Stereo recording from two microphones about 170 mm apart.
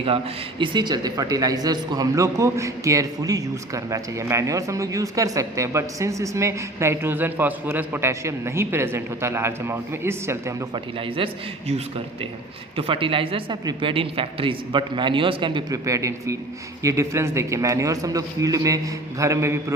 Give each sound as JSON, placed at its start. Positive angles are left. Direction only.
{"t": 0.6, "sound": "speech", "side_deg": -25}
{"t": 10.9, "sound": "speech", "side_deg": -30}
{"t": 12.7, "sound": "a man's voice", "side_deg": -30}